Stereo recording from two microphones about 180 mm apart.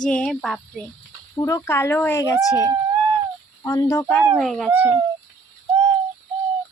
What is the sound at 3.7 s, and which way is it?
Speech, 15° left (ahead or behind).